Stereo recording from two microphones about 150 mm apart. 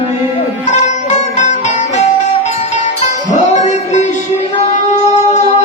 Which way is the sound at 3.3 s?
50° left (ahead or behind).